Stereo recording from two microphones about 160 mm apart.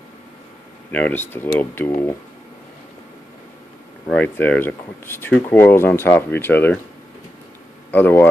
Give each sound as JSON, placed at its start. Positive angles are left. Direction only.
{"t": 0.9, "sound": "speech", "side_deg": 10}
{"t": 4.1, "sound": "speech", "side_deg": 10}
{"t": 7.9, "sound": "speech", "side_deg": 10}